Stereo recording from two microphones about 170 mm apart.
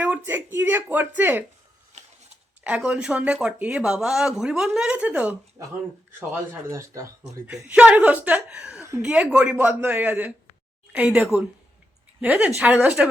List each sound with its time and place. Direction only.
0.0 s speech: 10° right (ahead or behind)
1.9 s a sound: 40° right (ahead or behind)
2.6 s speech: 5° right (ahead or behind)